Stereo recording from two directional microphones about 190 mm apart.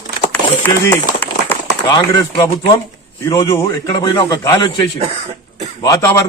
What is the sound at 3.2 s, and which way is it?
A man's voice, 20° left (ahead or behind).